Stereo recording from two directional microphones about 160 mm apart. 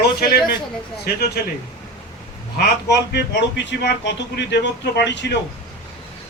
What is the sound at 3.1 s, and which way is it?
A man's voice, 90° left.